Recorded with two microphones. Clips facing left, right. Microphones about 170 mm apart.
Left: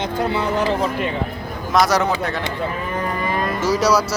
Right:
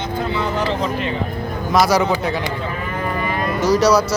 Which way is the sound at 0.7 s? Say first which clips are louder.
Left 1 dB; 10° left (ahead or behind).